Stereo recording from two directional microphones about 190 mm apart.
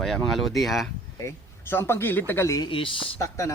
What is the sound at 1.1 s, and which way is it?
Speech, 15° left (ahead or behind).